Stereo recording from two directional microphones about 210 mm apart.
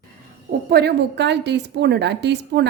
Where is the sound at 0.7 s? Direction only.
50° right (ahead or behind).